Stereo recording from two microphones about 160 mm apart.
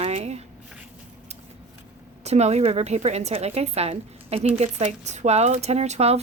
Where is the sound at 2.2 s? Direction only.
45° right (ahead or behind).